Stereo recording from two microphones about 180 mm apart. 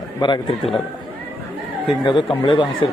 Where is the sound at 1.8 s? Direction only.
25° left (ahead or behind).